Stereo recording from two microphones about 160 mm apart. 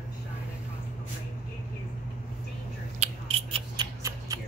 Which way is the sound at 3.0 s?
40° right (ahead or behind).